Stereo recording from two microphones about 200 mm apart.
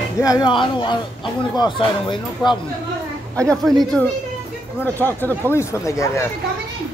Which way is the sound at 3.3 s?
5° left (ahead or behind).